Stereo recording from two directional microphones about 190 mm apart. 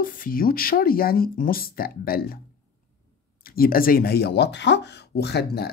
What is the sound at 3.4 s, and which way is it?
Speech, 50° left (ahead or behind).